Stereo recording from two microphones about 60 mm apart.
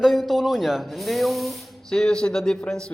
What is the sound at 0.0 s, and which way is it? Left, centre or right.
Speech, centre.